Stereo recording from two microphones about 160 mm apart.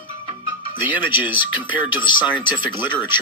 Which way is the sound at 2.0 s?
30° left (ahead or behind).